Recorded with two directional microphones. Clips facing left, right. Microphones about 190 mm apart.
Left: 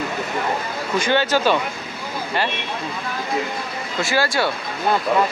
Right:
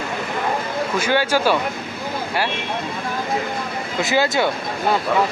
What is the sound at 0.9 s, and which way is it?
Speech, 10° right (ahead or behind).